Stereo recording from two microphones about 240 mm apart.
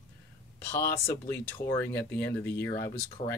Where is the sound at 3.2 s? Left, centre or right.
Left.